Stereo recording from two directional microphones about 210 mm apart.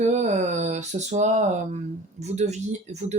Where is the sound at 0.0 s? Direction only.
35° right (ahead or behind).